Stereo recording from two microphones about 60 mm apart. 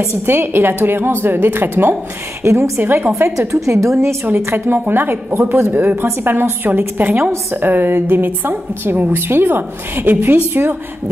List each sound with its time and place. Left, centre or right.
0.3 s a woman's voice: right
2.4 s a woman's voice: right
2.8 s a woman's voice: right
3.2 s a woman's voice: right
4.6 s a woman's voice: right